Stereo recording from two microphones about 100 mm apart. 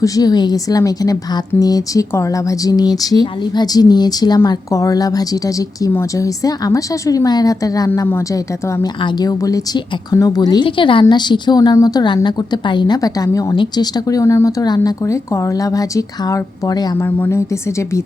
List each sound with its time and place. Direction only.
0.0 s a woman's voice: 40° left (ahead or behind)
9.0 s a woman's voice: 50° left (ahead or behind)
10.6 s a woman's voice: 55° left (ahead or behind)
13.0 s a woman's voice: 35° left (ahead or behind)
17.0 s a woman's voice: 20° left (ahead or behind)